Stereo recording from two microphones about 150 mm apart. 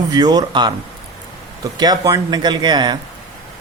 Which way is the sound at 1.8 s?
25° right (ahead or behind).